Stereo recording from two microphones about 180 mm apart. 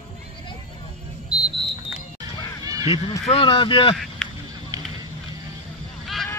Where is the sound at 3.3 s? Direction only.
30° left (ahead or behind).